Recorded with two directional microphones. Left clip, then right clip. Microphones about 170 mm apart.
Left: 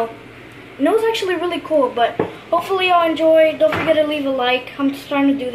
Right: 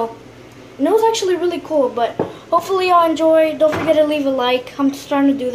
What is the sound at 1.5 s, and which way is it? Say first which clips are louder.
A woman's voice: even; 15° right (ahead or behind).